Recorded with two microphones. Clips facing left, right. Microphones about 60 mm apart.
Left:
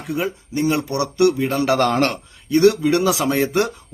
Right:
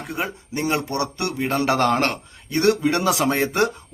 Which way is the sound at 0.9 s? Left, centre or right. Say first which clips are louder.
Left 8 dB; right.